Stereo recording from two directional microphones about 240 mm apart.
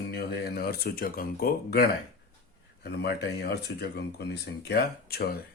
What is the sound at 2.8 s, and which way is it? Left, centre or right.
Speech, left.